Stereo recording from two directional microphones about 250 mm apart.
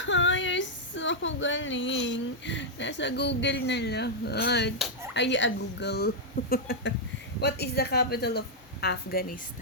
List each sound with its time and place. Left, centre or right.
0.0 s female singing: left
5.1 s a woman's voice: left